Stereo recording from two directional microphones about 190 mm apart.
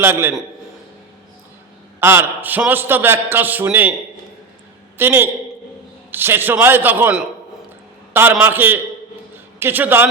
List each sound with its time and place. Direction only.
0.0 s a man's voice: 10° right (ahead or behind)
2.0 s a man's voice: 10° right (ahead or behind)
4.9 s a man's voice: 10° right (ahead or behind)